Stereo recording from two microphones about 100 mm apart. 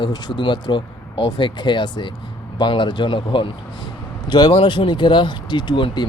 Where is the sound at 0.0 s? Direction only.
45° left (ahead or behind).